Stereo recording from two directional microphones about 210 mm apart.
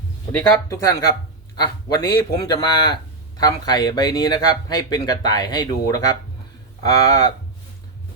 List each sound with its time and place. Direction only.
0.3 s a man's voice: 15° left (ahead or behind)